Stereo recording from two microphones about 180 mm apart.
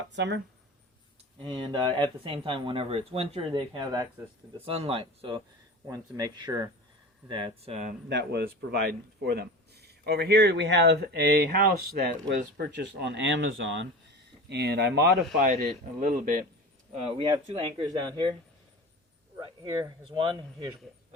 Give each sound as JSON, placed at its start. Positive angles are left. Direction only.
{"t": 0.1, "sound": "speech", "side_deg": -75}
{"t": 1.5, "sound": "speech", "side_deg": -25}
{"t": 5.9, "sound": "speech", "side_deg": -20}
{"t": 8.1, "sound": "a man's voice", "side_deg": -65}
{"t": 15.4, "sound": "speech", "side_deg": -55}
{"t": 16.9, "sound": "speech", "side_deg": -30}
{"t": 19.6, "sound": "speech", "side_deg": -20}